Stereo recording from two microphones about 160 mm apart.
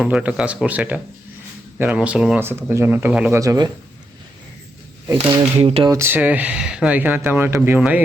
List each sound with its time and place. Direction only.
0.0 s speech: 5° right (ahead or behind)
3.3 s speech: 20° right (ahead or behind)
5.1 s speech: 40° right (ahead or behind)
5.9 s speech: 15° right (ahead or behind)